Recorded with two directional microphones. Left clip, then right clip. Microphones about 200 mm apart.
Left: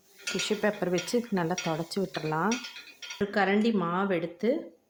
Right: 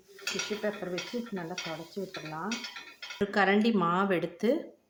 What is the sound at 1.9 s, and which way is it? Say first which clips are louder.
Stir: left 7 dB; 40° left (ahead or behind).